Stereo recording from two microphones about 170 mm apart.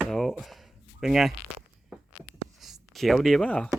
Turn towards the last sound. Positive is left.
turn(degrees=5)  # may be behind; listen again after turning